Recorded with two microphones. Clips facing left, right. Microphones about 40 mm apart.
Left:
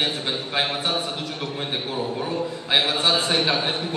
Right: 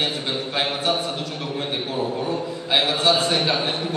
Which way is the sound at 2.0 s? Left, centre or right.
Centre.